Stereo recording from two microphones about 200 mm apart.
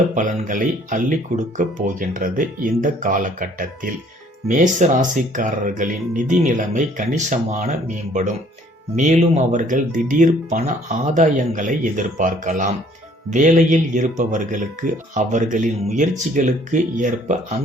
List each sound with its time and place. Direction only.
0.1 s speech: 40° right (ahead or behind)
9.0 s speech: 35° right (ahead or behind)